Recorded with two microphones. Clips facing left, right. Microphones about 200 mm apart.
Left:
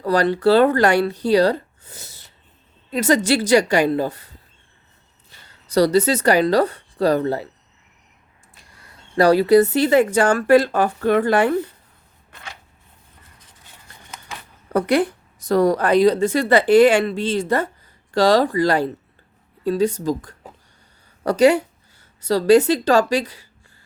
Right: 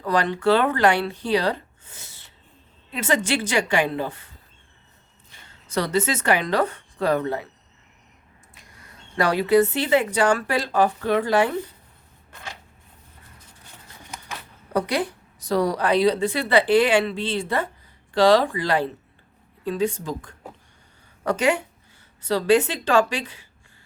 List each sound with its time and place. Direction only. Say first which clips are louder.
0.0 s speech: left 5 dB; 40° left (ahead or behind)
5.6 s speech: left 7 dB; 35° left (ahead or behind)
9.1 s a woman's voice: left 5 dB; 35° left (ahead or behind); by 11.5 s 55° left (ahead or behind)
14.7 s a woman's voice: left 6 dB; 55° left (ahead or behind)